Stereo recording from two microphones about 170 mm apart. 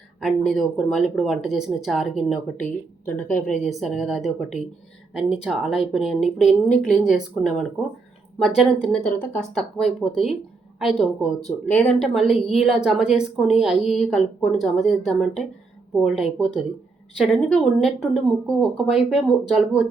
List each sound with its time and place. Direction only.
0.2 s a woman's voice: centre (ahead or behind)
3.5 s a woman's voice: centre (ahead or behind)